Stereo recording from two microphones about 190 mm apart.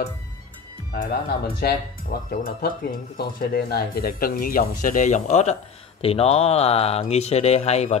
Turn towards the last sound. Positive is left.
turn(degrees=35)  # may be behind; listen again after turning